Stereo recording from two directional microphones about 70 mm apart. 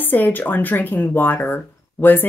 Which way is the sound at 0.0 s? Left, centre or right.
Left.